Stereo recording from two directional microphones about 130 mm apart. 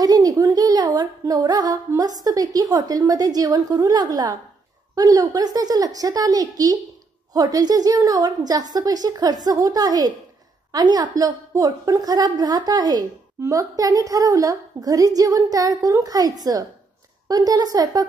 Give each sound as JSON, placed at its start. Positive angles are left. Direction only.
{"t": 0.0, "sound": "a woman's voice", "side_deg": -30}